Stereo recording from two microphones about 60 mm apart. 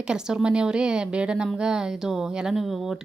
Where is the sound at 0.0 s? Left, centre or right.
Centre.